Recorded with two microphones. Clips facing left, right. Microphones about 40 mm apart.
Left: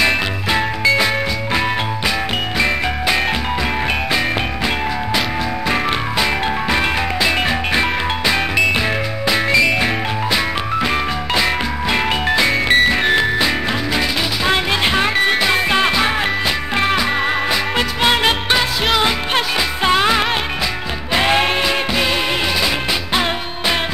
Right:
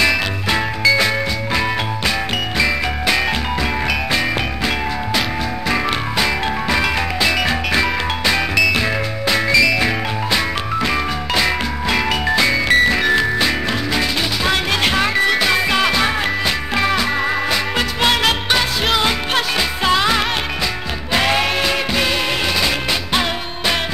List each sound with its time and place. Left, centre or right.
0.9 s music: centre
5.7 s music: centre
9.5 s music: left
10.3 s music: centre; by 13.3 s left
15.5 s music: left
18.5 s music: centre
19.3 s music: left